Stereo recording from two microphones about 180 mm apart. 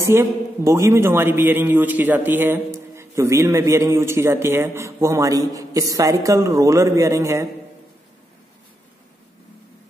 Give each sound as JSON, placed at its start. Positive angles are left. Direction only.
{"t": 0.0, "sound": "a man's voice", "side_deg": -15}